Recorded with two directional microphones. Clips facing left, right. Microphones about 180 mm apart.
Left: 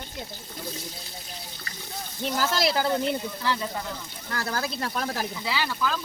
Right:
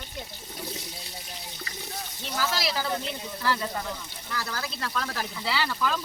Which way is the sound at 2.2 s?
55° left (ahead or behind).